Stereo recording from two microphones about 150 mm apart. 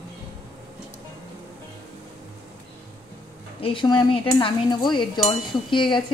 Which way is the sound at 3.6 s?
30° left (ahead or behind).